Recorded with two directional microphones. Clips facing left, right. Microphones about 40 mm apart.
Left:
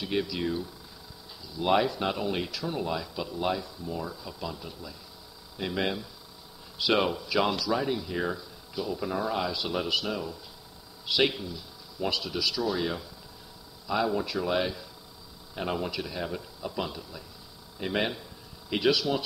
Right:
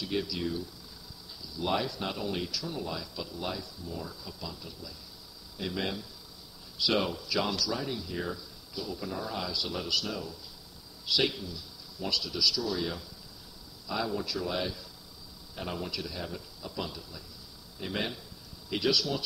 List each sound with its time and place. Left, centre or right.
0.0 s speech: left